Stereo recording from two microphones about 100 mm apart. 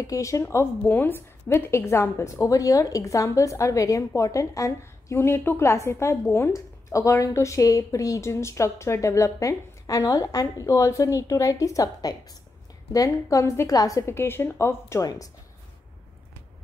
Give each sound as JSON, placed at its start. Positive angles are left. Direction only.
{"t": 0.0, "sound": "a woman's voice", "side_deg": 30}